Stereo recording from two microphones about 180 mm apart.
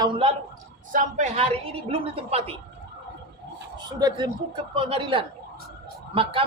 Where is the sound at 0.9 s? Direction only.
40° right (ahead or behind).